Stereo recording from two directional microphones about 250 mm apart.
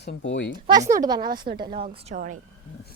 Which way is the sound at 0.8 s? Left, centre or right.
Right.